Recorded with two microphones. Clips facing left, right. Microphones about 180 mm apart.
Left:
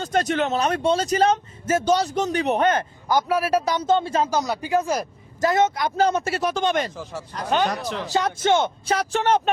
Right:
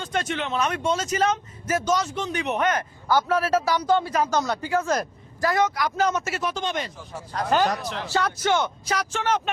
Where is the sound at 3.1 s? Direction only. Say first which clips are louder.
Left 1 dB; 15° left (ahead or behind).